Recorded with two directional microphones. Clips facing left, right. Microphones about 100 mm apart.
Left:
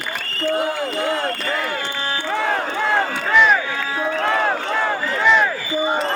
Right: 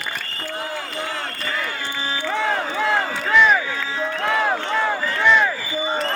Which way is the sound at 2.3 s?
Centre (ahead or behind).